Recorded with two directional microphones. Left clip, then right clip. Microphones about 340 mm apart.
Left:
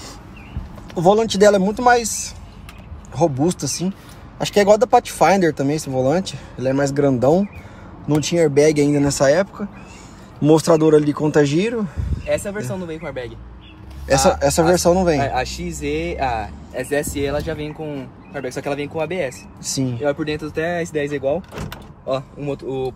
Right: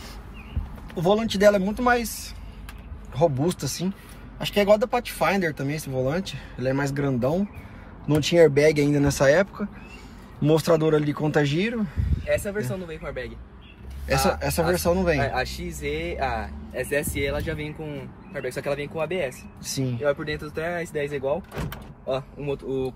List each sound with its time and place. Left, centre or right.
0.9 s speech: centre
8.1 s speech: centre
12.4 s speech: left
14.0 s speech: centre
15.2 s speech: left
19.6 s speech: centre
20.0 s speech: left